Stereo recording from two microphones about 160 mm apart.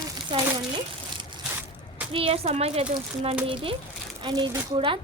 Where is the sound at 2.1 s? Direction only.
35° right (ahead or behind).